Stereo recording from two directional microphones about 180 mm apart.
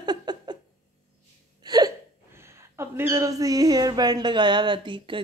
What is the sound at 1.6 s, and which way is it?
Speech, 20° right (ahead or behind).